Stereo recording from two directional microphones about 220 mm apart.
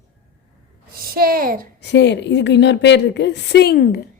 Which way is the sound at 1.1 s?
40° right (ahead or behind).